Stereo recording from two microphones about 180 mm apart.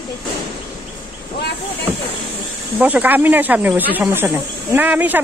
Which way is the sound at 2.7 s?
10° right (ahead or behind).